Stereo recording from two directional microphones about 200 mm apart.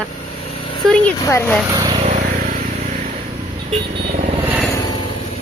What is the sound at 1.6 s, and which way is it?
Speech, 15° right (ahead or behind).